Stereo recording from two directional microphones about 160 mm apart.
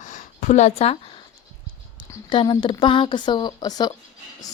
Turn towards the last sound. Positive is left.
turn(degrees=25)  # may be behind; listen again after turning